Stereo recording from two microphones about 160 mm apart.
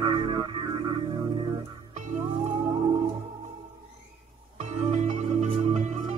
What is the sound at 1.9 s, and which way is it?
Music, 45° right (ahead or behind).